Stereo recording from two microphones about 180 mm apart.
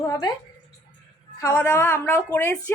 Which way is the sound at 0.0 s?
20° left (ahead or behind).